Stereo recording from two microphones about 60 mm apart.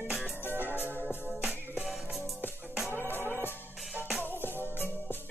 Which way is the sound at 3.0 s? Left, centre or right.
Left.